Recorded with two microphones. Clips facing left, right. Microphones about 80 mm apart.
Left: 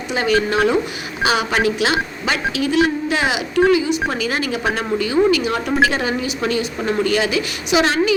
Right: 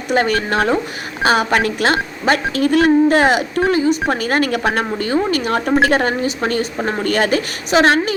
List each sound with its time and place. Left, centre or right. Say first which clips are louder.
0.1 s speech: right 1 dB; right